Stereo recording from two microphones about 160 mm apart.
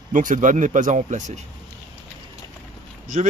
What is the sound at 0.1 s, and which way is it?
Speech, 55° right (ahead or behind).